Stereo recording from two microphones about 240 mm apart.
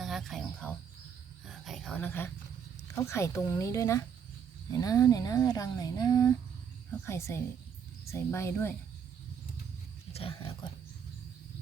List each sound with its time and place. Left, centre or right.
0.0 s cricket: centre
1.5 s a sound: centre
2.8 s speech: centre
10.1 s speech: left